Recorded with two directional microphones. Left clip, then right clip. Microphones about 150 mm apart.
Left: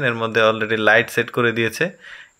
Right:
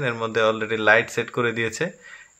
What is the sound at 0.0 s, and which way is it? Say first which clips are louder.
Speech: left 4 dB; 25° left (ahead or behind).